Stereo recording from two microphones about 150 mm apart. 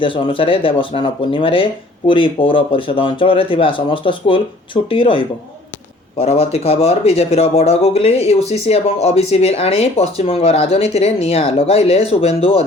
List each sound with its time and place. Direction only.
0.0 s speech: 35° left (ahead or behind)